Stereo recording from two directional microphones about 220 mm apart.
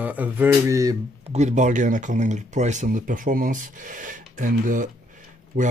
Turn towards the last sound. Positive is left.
turn(degrees=-40)  # may be behind; listen again after turning